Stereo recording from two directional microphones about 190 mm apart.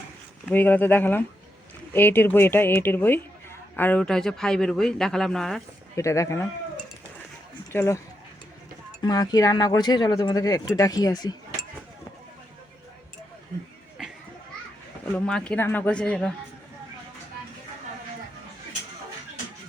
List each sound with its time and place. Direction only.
0.5 s speech: 10° left (ahead or behind)
6.0 s speech: 15° left (ahead or behind)
7.7 s speech: 15° left (ahead or behind)
14.0 s children playing: centre (ahead or behind)
15.1 s speech: 5° left (ahead or behind)